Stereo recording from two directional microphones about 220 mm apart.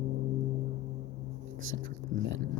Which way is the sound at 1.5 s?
65° right (ahead or behind).